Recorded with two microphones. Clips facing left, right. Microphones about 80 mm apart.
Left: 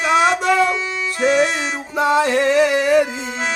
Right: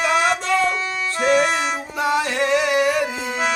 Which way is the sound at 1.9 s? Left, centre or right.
Left.